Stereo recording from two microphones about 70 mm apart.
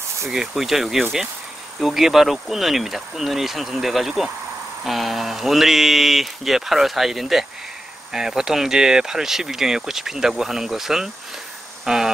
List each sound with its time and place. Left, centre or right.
0.3 s speech: centre